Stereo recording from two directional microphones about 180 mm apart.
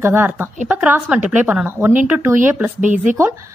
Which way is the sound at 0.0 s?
10° right (ahead or behind).